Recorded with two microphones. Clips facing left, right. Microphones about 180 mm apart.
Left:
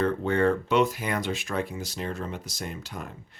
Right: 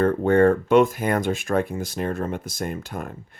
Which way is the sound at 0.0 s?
50° right (ahead or behind).